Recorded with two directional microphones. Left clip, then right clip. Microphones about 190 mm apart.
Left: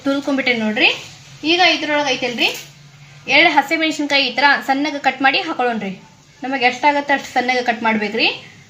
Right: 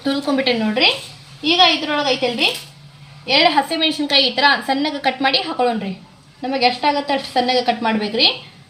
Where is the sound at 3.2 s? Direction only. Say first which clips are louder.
Left 2 dB; 20° right (ahead or behind).